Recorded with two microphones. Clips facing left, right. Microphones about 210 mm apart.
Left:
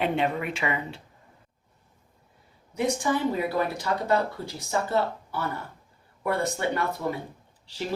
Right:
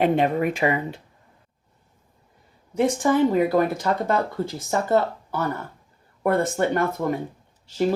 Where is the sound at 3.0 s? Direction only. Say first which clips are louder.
Right 7 dB; 50° right (ahead or behind).